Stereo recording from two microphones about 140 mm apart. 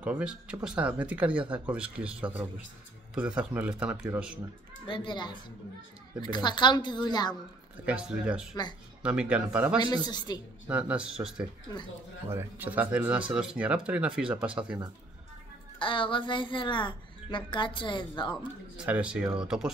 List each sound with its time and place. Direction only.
0.0 s speech: 5° right (ahead or behind)
4.8 s speech: 35° left (ahead or behind)
7.8 s speech: 10° right (ahead or behind)
9.8 s speech: 30° left (ahead or behind)
10.7 s speech: 10° right (ahead or behind)
15.8 s speech: 35° left (ahead or behind)
18.8 s speech: 5° right (ahead or behind)